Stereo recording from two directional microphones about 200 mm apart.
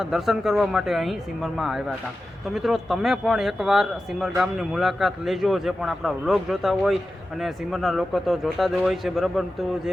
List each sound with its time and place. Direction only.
0.0 s speech: centre (ahead or behind)